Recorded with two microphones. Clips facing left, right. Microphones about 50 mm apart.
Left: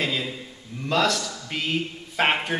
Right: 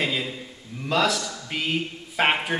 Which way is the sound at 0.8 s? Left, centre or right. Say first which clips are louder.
Even; centre.